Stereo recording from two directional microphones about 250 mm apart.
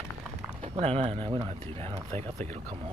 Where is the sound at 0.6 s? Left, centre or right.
Right.